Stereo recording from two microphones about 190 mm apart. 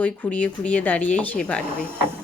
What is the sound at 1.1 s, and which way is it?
Stir, 5° left (ahead or behind).